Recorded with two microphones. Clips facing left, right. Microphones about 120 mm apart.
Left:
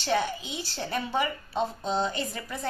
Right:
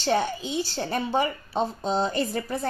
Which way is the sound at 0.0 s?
35° right (ahead or behind).